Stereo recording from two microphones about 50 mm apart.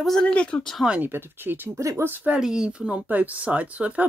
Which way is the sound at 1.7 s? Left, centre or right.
Right.